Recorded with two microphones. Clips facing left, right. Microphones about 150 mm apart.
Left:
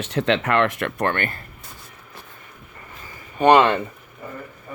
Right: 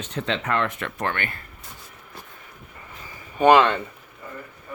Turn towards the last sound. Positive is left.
turn(degrees=-10)  # may be behind; listen again after turning